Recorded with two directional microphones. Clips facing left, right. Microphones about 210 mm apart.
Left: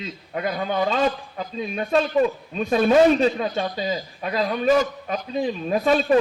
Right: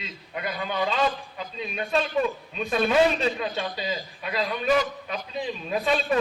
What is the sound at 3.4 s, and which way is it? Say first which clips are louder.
A man's voice: left 5 dB; 45° left (ahead or behind).